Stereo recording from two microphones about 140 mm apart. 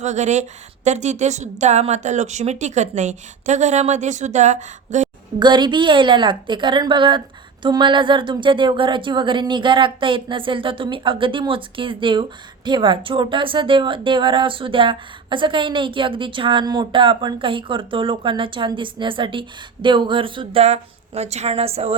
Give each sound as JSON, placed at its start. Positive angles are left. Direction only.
{"t": 0.0, "sound": "a woman's voice", "side_deg": -55}
{"t": 5.4, "sound": "a woman's voice", "side_deg": -35}